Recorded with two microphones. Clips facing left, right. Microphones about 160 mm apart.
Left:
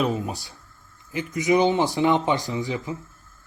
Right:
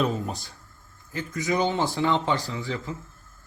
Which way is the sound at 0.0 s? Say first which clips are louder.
Left 2 dB; 15° left (ahead or behind).